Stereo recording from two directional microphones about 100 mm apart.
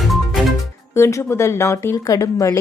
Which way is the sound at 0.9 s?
30° left (ahead or behind).